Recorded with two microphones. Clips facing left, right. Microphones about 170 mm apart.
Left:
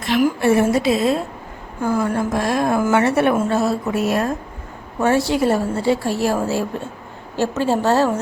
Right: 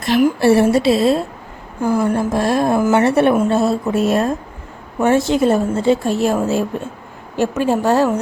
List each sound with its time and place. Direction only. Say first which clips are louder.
0.2 s a woman's voice: right 3 dB; 35° right (ahead or behind); by 8.2 s 15° right (ahead or behind)